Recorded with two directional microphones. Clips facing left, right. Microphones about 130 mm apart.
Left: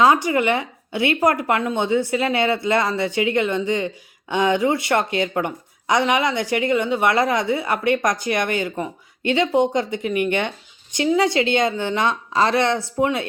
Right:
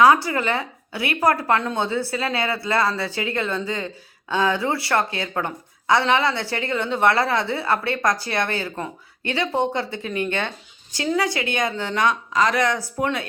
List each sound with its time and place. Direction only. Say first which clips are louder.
0.0 s a woman's voice: even; 20° left (ahead or behind)